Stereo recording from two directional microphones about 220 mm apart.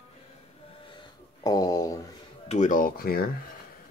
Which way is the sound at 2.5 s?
35° left (ahead or behind).